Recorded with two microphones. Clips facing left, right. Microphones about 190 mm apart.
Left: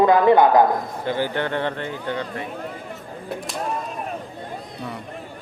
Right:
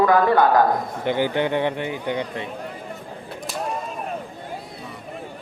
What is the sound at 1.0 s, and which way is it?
A man's voice, 20° right (ahead or behind).